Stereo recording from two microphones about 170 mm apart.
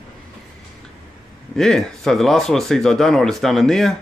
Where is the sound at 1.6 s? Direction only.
5° left (ahead or behind).